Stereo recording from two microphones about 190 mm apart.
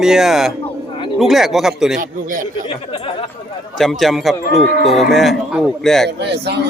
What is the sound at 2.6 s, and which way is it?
Speech, 30° left (ahead or behind).